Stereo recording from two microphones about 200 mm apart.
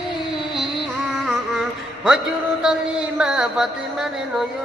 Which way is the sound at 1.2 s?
Centre (ahead or behind).